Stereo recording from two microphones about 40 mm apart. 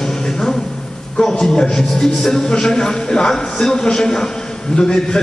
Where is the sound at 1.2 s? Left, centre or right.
Centre.